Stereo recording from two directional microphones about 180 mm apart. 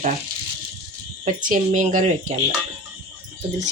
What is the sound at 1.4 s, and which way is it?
Speech, 45° right (ahead or behind).